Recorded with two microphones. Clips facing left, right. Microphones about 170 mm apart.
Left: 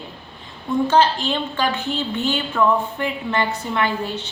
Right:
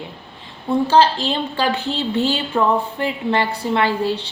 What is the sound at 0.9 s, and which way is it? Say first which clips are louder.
A woman's voice: right 3 dB; 35° right (ahead or behind).